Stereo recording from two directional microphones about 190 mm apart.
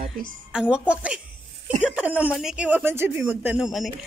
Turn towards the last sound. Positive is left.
turn(degrees=0)  # may be behind; listen again after turning